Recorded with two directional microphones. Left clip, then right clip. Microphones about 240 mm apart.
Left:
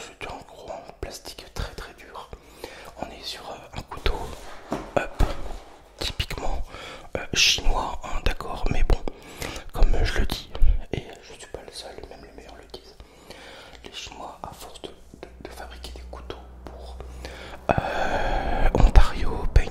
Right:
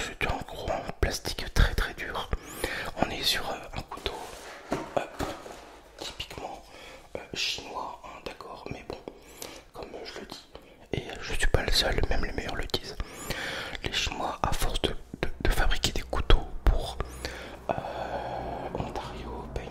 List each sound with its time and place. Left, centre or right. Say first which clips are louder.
0.0 s whispering: right 5 dB; centre
4.1 s a sound: left 6 dB; left
5.9 s whispering: left 8 dB; left
10.9 s whispering: left 1 dB; centre
11.2 s whispering: right 10 dB; right
17.6 s whispering: left 8 dB; left